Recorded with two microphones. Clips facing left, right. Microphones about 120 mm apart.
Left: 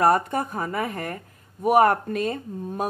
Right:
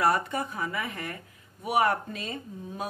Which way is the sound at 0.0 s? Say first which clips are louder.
Left 6 dB; 45° left (ahead or behind).